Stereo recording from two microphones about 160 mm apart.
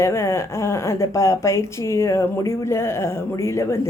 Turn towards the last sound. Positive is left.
turn(degrees=15)  # may be behind; listen again after turning